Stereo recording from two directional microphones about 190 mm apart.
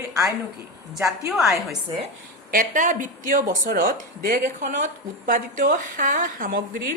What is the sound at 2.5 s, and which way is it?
Speech, 45° right (ahead or behind).